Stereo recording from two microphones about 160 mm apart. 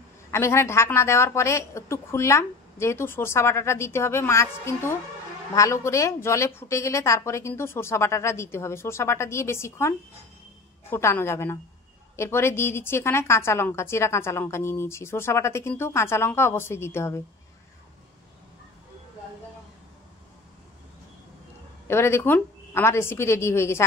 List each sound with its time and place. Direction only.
0.3 s a woman's voice: 15° left (ahead or behind)
21.8 s a woman's voice: 15° left (ahead or behind)